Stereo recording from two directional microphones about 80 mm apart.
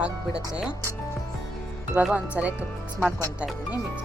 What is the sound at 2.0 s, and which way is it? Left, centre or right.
Speech, centre.